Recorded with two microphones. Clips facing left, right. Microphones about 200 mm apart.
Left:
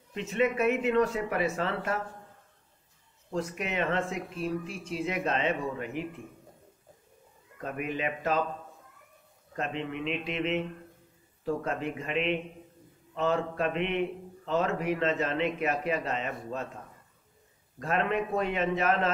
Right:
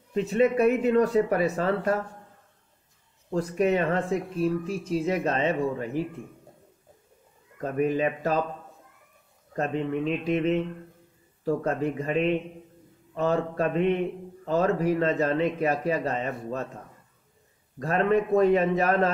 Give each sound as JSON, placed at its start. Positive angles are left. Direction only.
{"t": 0.1, "sound": "a man's voice", "side_deg": -35}
{"t": 3.3, "sound": "a man's voice", "side_deg": -40}
{"t": 7.7, "sound": "a man's voice", "side_deg": -35}
{"t": 9.6, "sound": "a man's voice", "side_deg": -40}
{"t": 17.7, "sound": "a man's voice", "side_deg": -35}